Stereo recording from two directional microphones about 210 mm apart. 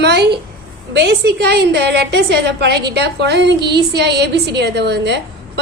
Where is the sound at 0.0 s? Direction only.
50° right (ahead or behind).